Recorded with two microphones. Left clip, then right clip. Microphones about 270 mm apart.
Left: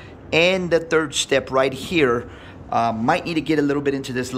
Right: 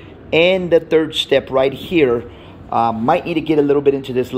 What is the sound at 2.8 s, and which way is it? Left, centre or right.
Speech, centre.